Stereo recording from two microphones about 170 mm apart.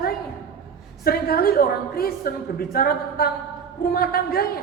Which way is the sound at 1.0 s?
60° left (ahead or behind).